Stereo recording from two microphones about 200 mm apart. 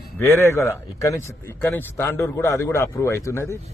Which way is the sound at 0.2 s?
15° left (ahead or behind).